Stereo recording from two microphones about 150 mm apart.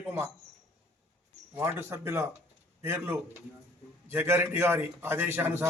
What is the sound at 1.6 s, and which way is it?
A man's voice, 15° right (ahead or behind).